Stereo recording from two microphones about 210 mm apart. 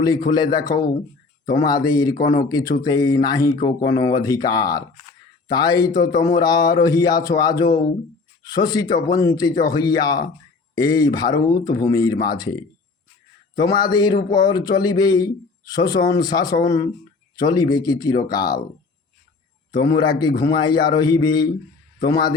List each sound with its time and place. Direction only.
0.3 s a man's voice: 20° left (ahead or behind)
13.6 s a man's voice: 20° left (ahead or behind)
19.7 s a man's voice: 20° left (ahead or behind)